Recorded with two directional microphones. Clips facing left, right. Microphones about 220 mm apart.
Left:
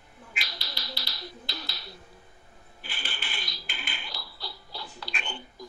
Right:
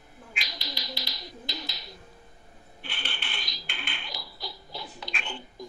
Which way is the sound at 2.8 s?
5° left (ahead or behind).